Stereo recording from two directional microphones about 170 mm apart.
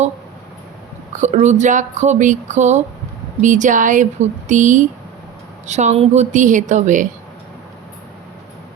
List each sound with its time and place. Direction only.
1.1 s speech: 45° right (ahead or behind)